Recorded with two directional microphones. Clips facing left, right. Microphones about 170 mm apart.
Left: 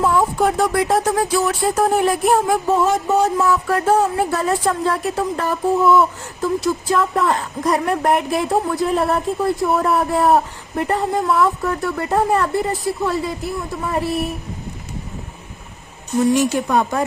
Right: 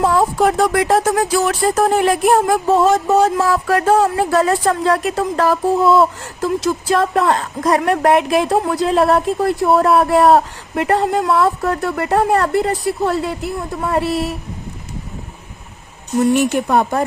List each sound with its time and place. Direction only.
0.0 s a woman's voice: 80° right
16.2 s speech: 65° right (ahead or behind)